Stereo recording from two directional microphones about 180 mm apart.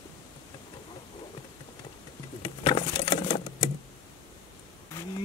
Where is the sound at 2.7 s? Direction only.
30° left (ahead or behind).